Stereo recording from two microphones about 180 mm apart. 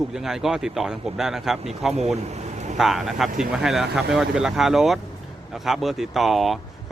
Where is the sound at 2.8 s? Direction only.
Centre (ahead or behind).